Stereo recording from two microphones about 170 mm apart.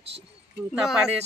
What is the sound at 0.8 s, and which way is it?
Speech, 5° right (ahead or behind).